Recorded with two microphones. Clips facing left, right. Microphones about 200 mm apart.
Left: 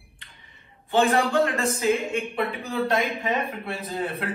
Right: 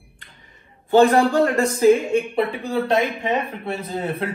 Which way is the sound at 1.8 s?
30° right (ahead or behind).